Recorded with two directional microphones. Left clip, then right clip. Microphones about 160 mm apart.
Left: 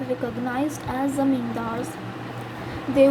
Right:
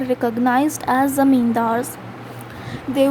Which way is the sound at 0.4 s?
45° right (ahead or behind).